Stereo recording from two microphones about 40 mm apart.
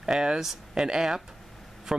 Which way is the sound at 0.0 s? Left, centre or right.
Centre.